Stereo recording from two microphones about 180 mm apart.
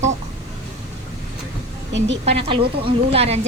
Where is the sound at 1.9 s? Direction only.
85° right.